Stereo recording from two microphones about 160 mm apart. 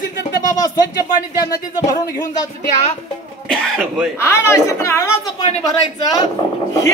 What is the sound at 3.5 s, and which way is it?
Speech, 5° left (ahead or behind).